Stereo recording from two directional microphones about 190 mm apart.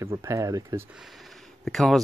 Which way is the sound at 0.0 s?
15° right (ahead or behind).